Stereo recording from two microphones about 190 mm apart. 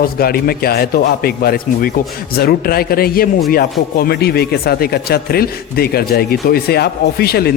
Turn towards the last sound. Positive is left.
turn(degrees=55)  # may be behind; listen again after turning